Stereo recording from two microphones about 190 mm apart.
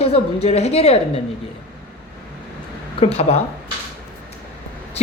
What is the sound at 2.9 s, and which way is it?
Speech, 30° left (ahead or behind).